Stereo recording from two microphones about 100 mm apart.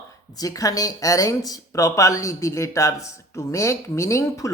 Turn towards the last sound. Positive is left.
turn(degrees=30)  # may be behind; listen again after turning